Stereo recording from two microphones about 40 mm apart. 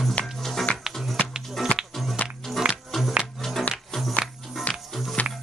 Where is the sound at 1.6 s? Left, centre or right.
Centre.